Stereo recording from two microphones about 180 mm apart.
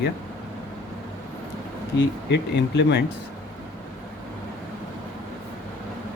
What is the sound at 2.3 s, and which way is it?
Speech, 70° left (ahead or behind).